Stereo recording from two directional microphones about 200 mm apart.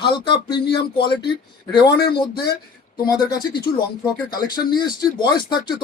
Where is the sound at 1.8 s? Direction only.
55° left (ahead or behind).